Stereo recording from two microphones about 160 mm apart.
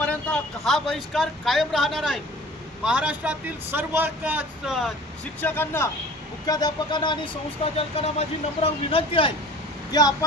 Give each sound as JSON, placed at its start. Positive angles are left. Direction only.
{"t": 0.0, "sound": "speech", "side_deg": 10}
{"t": 5.4, "sound": "speech", "side_deg": 10}
{"t": 6.4, "sound": "speech", "side_deg": 25}
{"t": 9.9, "sound": "speech", "side_deg": 25}